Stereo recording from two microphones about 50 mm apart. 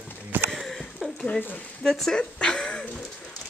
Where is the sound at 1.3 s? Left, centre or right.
Left.